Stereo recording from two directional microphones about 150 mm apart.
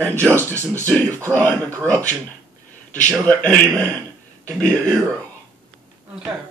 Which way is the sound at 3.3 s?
10° left (ahead or behind).